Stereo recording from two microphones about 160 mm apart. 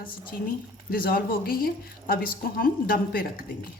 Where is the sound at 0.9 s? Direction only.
65° left (ahead or behind).